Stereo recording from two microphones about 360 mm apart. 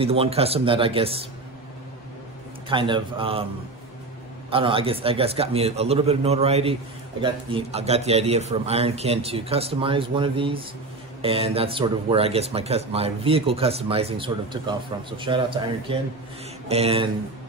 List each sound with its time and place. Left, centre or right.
0.0 s a man's voice: centre
2.7 s a man's voice: centre
4.5 s a man's voice: centre